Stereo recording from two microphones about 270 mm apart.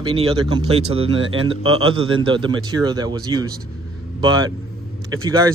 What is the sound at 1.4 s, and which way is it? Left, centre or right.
Speech, centre.